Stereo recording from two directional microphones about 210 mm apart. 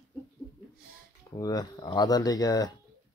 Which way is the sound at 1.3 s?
15° left (ahead or behind).